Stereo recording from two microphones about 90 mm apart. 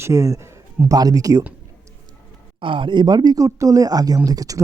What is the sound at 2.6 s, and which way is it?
Speech, 70° right (ahead or behind).